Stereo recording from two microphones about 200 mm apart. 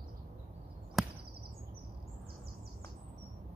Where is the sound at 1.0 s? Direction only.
Centre (ahead or behind).